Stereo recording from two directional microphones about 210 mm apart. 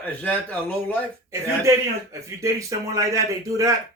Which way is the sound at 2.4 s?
15° right (ahead or behind).